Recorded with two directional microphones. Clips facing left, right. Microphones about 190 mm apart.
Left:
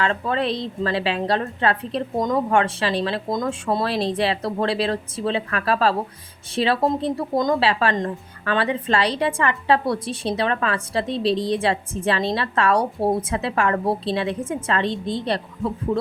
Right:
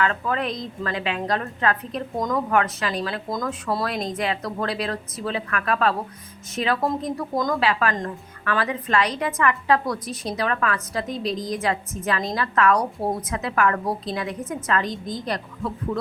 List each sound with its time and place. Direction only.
0.0 s a woman's voice: 30° left (ahead or behind)